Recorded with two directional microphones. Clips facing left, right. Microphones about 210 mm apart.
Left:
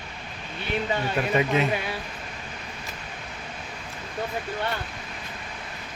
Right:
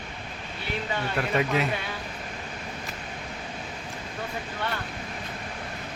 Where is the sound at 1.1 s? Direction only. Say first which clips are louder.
Left 2 dB; 5° left (ahead or behind).